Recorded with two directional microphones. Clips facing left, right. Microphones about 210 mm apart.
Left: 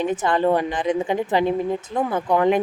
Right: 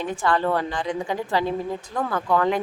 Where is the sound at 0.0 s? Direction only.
20° left (ahead or behind).